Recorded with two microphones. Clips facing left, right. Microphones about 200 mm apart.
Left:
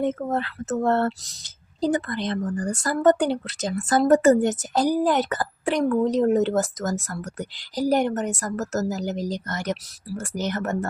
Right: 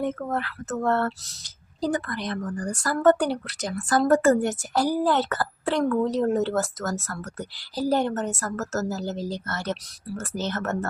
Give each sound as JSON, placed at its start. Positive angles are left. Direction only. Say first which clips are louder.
{"t": 0.0, "sound": "speech", "louder": "left 3 dB", "side_deg": 20}